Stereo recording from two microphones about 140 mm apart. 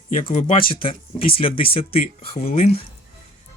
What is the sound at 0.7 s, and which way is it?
Speech, 40° left (ahead or behind).